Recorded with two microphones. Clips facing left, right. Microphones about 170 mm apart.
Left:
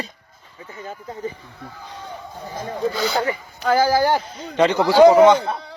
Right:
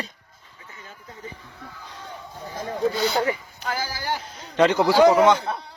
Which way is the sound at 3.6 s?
75° left (ahead or behind).